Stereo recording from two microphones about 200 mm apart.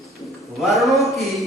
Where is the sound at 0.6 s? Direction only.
Centre (ahead or behind).